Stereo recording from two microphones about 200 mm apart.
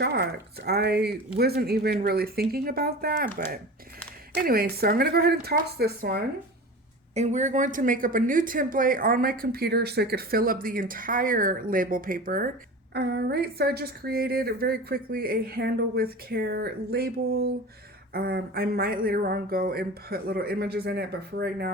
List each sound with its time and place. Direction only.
0.0 s speech: 55° right (ahead or behind)
4.4 s speech: 50° right (ahead or behind)
7.1 s speech: 35° right (ahead or behind)
12.9 s speech: 55° right (ahead or behind)